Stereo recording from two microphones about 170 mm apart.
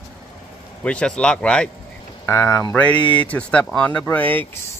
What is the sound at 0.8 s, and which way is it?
Speech, 5° left (ahead or behind).